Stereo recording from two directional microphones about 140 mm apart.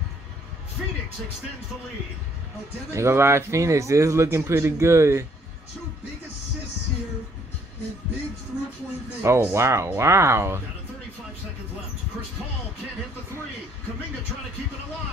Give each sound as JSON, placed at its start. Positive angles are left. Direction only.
{"t": 2.9, "sound": "a man's voice", "side_deg": -20}
{"t": 9.2, "sound": "a man's voice", "side_deg": -20}